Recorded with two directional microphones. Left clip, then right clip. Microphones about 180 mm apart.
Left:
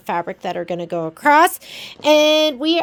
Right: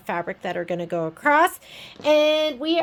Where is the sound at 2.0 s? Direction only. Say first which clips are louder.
Left 5 dB; 55° left (ahead or behind).